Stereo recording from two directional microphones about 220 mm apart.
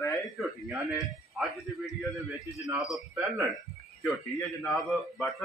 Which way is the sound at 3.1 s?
15° right (ahead or behind).